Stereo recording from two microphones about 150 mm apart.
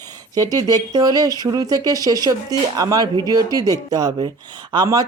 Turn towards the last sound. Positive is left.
turn(degrees=-25)  # may be behind; listen again after turning